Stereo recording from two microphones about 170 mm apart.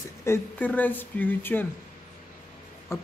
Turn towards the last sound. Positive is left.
turn(degrees=15)  # may be behind; listen again after turning